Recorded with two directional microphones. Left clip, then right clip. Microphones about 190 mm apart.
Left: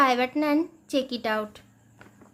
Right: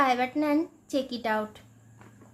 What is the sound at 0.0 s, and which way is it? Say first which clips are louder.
A woman's voice: left 3 dB; 25° left (ahead or behind).